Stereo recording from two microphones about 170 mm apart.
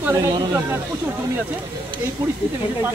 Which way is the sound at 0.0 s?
15° right (ahead or behind).